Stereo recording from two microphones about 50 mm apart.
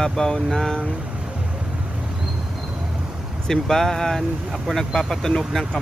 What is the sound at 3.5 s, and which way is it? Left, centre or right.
Speech, centre.